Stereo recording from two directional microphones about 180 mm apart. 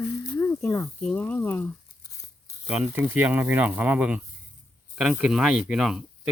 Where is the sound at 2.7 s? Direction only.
5° right (ahead or behind).